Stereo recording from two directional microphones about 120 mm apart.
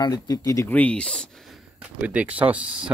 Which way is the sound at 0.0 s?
35° left (ahead or behind).